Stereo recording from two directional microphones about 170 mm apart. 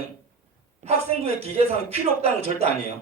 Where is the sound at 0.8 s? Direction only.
35° right (ahead or behind).